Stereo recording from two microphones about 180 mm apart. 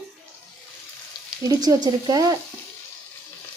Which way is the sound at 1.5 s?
20° right (ahead or behind).